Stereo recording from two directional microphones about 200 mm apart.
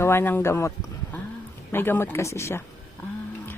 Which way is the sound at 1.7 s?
10° left (ahead or behind).